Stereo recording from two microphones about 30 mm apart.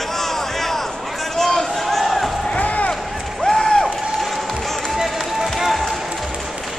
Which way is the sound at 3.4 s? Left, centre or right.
Centre.